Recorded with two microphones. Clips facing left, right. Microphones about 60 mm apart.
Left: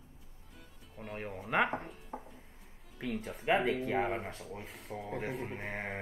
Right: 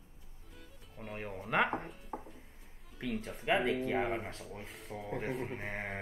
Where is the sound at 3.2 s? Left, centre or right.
Centre.